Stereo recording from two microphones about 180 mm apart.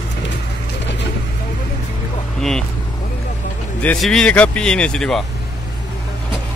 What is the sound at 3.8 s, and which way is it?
Speech, 5° left (ahead or behind).